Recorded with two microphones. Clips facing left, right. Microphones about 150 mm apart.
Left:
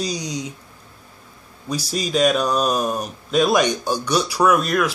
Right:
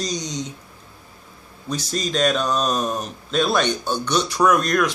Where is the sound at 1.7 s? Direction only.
10° left (ahead or behind).